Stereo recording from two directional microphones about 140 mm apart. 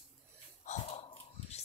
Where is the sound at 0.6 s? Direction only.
60° left (ahead or behind).